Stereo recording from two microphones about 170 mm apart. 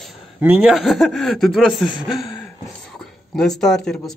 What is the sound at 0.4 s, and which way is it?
Speech, 5° right (ahead or behind).